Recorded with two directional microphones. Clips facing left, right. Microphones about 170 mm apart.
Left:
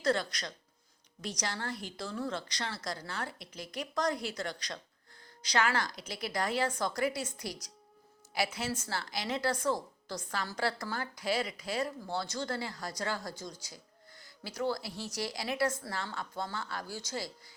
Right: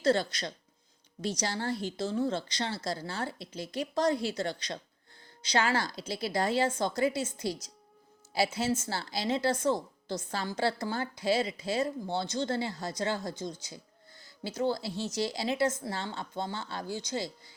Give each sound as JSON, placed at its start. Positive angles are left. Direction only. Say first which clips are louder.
{"t": 0.0, "sound": "a woman's voice", "louder": "right 4 dB", "side_deg": -30}